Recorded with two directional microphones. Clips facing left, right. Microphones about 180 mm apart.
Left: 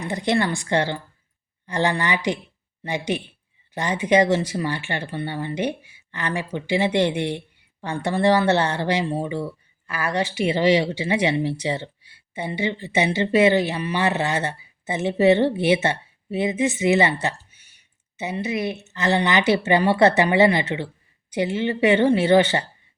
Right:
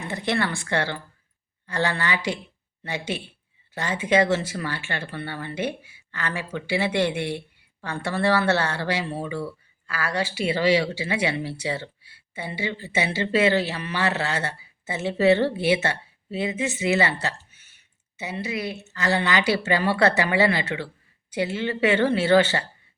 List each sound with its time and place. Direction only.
0.0 s speech: 15° left (ahead or behind)